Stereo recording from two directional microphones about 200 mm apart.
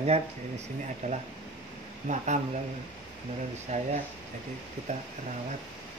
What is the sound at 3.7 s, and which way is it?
Speech, 35° right (ahead or behind).